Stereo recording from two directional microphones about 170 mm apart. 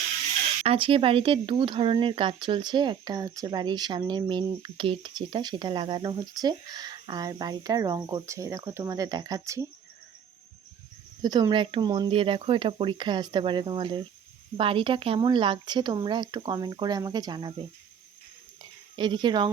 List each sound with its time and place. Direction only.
0.6 s speech: 35° right (ahead or behind)
11.2 s speech: 25° right (ahead or behind)
18.9 s speech: 25° right (ahead or behind)